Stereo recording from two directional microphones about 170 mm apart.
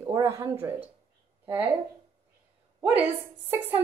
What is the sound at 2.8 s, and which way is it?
Speech, 10° right (ahead or behind).